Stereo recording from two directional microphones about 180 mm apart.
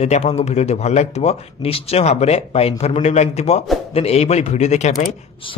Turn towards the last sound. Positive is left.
turn(degrees=40)  # may be behind; listen again after turning